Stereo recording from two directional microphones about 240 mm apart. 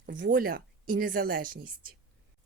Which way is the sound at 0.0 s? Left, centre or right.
Right.